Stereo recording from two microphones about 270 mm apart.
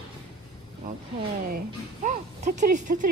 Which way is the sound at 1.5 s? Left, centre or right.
Right.